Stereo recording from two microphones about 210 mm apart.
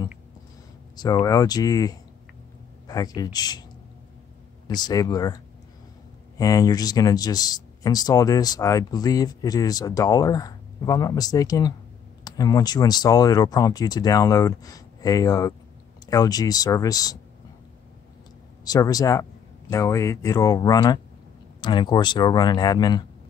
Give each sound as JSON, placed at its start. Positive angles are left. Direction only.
{"t": 0.9, "sound": "speech", "side_deg": 20}
{"t": 3.2, "sound": "speech", "side_deg": 20}
{"t": 4.6, "sound": "speech", "side_deg": 20}
{"t": 18.6, "sound": "speech", "side_deg": 20}